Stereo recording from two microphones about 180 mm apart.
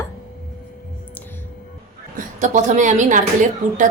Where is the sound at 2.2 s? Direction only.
45° right (ahead or behind).